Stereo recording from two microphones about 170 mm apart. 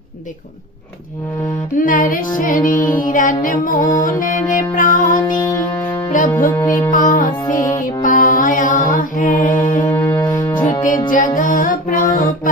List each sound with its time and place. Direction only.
1.8 s music: 55° left (ahead or behind)
6.5 s music: 20° left (ahead or behind)
6.9 s music: 50° left (ahead or behind)
9.9 s music: 15° left (ahead or behind)
11.1 s music: 50° left (ahead or behind)